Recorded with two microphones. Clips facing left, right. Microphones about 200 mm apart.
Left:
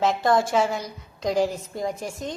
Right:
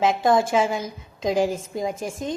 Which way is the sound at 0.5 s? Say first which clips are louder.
Right 1 dB; 10° right (ahead or behind).